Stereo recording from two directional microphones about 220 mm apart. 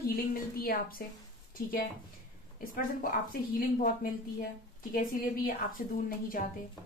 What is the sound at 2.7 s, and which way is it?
A woman's voice, 40° left (ahead or behind).